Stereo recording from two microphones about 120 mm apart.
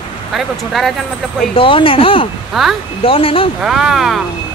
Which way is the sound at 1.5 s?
50° left (ahead or behind).